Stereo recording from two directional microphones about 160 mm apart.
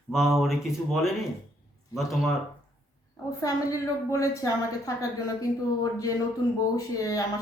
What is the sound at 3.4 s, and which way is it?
A woman's voice, 20° left (ahead or behind).